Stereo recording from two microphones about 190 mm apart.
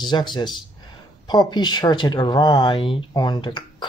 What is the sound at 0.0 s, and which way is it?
Speech, 25° left (ahead or behind).